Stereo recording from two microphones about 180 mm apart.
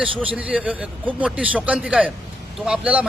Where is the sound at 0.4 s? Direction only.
5° right (ahead or behind).